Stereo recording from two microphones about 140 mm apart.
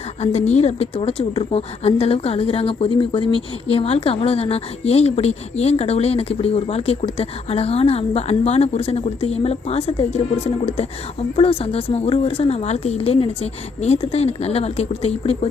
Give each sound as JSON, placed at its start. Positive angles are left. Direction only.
{"t": 0.2, "sound": "speech", "side_deg": 50}